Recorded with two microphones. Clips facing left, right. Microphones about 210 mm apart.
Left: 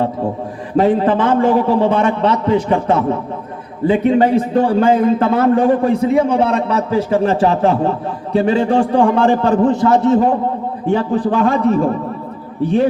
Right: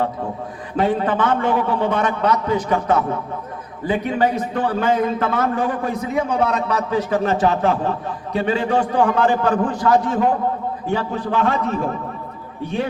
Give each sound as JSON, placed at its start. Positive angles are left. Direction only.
{"t": 0.8, "sound": "a man's voice", "side_deg": 30}